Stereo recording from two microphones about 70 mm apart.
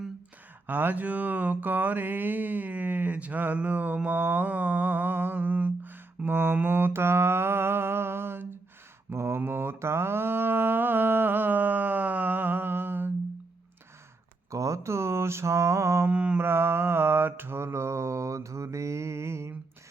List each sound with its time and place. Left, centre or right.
0.7 s mantra: right
14.5 s mantra: right
16.0 s mantra: centre
16.4 s mantra: right